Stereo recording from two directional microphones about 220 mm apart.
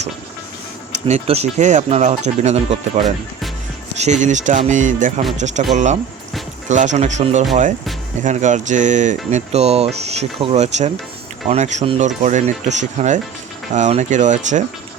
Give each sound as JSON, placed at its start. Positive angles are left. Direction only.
{"t": 1.0, "sound": "speech", "side_deg": -30}